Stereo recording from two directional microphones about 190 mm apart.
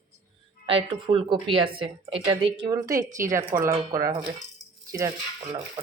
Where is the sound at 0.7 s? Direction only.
30° right (ahead or behind).